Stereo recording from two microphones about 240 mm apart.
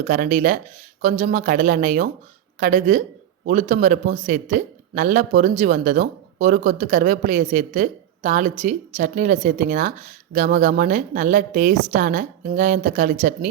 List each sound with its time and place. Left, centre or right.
0.0 s speech: right